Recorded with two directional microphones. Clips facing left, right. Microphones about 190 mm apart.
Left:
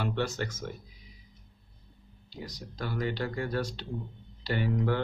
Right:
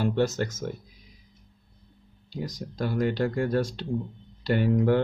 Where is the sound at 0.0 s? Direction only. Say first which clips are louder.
Right 6 dB; 40° right (ahead or behind).